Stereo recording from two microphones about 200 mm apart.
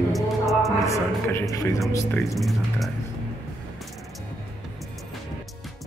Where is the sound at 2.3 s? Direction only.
Centre (ahead or behind).